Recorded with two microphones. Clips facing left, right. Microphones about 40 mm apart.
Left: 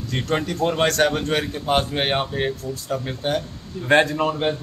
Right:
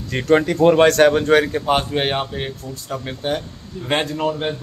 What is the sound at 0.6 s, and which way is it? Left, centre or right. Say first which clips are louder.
Speech: right 6 dB; centre.